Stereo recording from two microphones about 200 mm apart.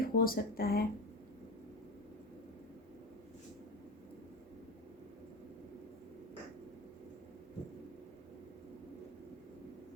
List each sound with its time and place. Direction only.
0.0 s speech: 45° left (ahead or behind)